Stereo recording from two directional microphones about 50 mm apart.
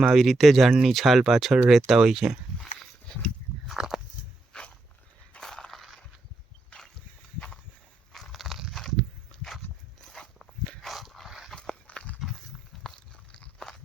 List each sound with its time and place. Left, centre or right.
0.0 s speech: centre
3.7 s a sound: centre
4.5 s dog: centre
5.4 s crushing: centre
6.7 s a sound: left
8.1 s biting: centre
9.0 s walk: centre
10.8 s dog: centre
11.5 s walk: centre
12.2 s walk: centre
12.8 s biting: centre